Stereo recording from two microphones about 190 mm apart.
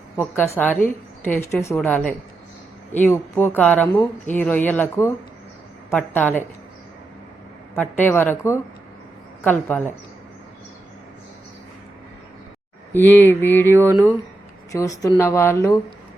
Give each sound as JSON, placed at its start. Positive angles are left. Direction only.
{"t": 0.2, "sound": "speech", "side_deg": 10}
{"t": 7.8, "sound": "speech", "side_deg": 10}
{"t": 12.9, "sound": "speech", "side_deg": 10}